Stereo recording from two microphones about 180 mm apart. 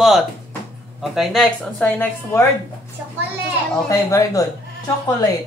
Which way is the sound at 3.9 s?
20° left (ahead or behind).